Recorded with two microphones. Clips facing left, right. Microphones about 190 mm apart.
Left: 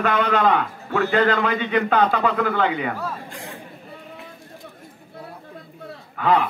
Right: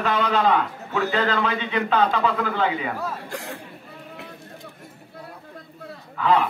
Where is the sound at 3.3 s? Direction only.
70° right (ahead or behind).